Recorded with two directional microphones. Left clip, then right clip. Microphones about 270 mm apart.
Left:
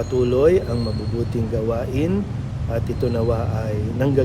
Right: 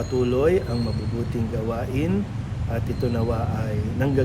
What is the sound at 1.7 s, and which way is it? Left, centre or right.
Speech, centre.